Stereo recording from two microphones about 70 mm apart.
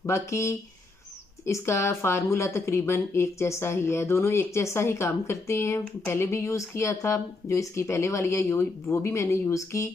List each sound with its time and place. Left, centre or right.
0.0 s speech: left